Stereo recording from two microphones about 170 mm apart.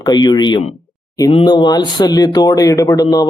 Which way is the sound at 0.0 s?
25° left (ahead or behind).